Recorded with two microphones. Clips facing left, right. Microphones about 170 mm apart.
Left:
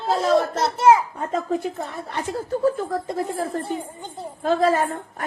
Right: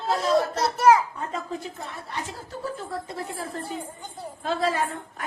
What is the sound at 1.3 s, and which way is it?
Speech, 50° left (ahead or behind).